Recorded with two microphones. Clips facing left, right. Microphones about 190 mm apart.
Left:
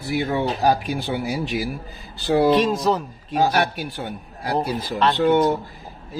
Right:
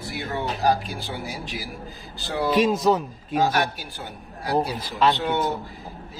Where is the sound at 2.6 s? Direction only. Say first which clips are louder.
Even; 5° right (ahead or behind).